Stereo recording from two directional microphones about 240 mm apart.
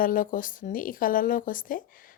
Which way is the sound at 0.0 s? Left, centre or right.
Left.